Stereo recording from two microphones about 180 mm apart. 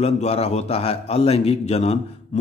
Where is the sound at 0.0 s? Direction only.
35° left (ahead or behind).